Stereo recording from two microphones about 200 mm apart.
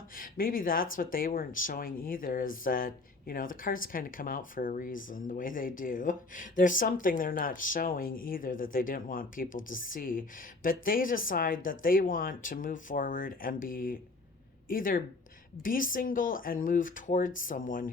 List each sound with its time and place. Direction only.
0.2 s speech: 45° left (ahead or behind)